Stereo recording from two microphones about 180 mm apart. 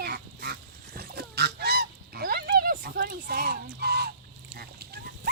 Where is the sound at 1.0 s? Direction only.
60° right (ahead or behind).